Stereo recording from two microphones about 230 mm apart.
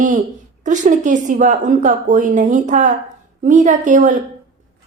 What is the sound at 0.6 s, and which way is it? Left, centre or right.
A woman's voice, right.